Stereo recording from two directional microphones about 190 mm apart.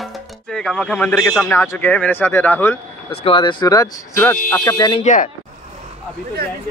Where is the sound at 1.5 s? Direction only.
15° left (ahead or behind).